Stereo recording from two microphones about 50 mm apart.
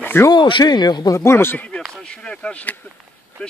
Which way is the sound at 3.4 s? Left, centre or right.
Centre.